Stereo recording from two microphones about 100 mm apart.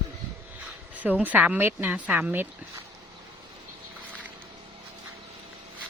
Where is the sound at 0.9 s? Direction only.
15° right (ahead or behind).